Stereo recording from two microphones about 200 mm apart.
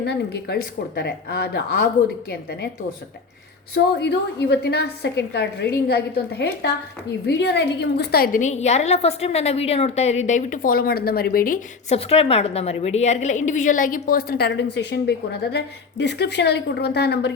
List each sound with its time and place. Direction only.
0.0 s a woman's voice: 55° left (ahead or behind)
3.8 s a woman's voice: 60° left (ahead or behind); by 11.9 s 45° left (ahead or behind)
11.9 s a woman's voice: 30° left (ahead or behind); by 17.3 s 55° left (ahead or behind)